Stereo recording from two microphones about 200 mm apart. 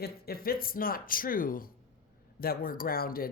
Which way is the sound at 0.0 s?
50° left (ahead or behind).